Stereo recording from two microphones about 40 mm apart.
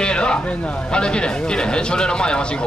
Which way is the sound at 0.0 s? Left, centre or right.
Left.